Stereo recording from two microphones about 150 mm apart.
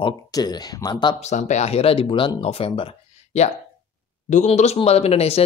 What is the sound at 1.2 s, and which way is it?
Speech, 50° left (ahead or behind).